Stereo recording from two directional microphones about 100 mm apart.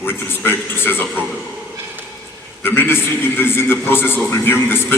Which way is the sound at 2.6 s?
25° left (ahead or behind).